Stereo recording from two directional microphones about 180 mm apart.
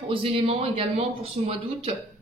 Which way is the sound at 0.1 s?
30° right (ahead or behind).